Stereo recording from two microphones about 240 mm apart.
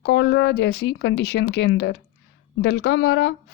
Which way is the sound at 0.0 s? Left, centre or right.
Left.